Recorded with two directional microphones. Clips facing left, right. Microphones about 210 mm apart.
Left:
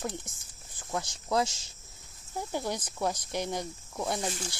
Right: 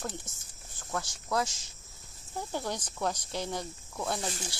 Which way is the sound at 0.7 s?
20° left (ahead or behind).